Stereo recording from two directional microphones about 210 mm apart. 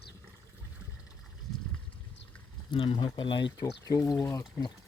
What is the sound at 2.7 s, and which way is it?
Speech, 25° left (ahead or behind).